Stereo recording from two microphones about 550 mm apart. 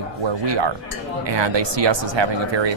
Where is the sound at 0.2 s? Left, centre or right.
Right.